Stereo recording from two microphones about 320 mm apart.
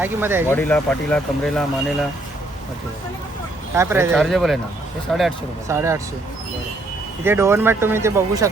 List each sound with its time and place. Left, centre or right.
0.0 s speech: centre
0.5 s speech: centre
3.8 s speech: centre
7.3 s speech: centre